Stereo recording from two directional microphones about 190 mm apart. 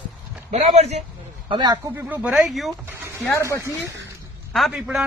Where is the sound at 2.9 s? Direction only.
10° right (ahead or behind).